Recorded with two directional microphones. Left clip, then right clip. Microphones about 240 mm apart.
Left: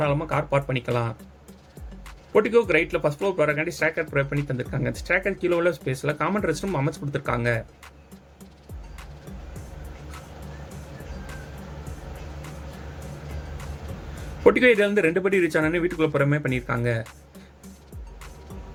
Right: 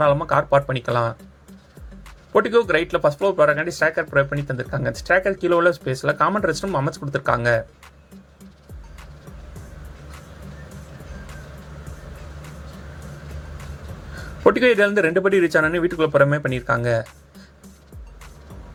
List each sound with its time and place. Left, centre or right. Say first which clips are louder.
0.0 s speech: right 7 dB; centre
2.3 s speech: right 2 dB; centre
14.4 s speech: right 2 dB; centre